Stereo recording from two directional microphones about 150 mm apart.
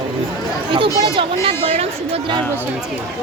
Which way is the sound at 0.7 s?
35° right (ahead or behind).